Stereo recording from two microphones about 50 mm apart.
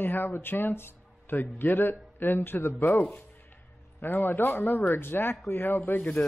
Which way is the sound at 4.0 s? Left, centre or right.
Left.